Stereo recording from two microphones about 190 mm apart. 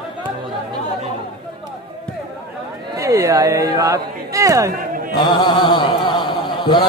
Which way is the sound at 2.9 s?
15° right (ahead or behind).